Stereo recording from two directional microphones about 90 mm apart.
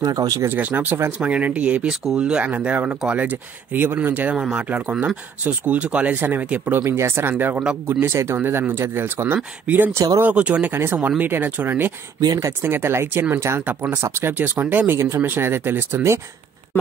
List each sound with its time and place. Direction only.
0.0 s speech: 45° right (ahead or behind)
0.5 s speech: 20° right (ahead or behind)
9.9 s speech: 35° right (ahead or behind)
10.2 s speech: 15° right (ahead or behind)
12.2 s speech: 40° right (ahead or behind); by 15.0 s 20° right (ahead or behind)
15.0 s speech: 30° right (ahead or behind)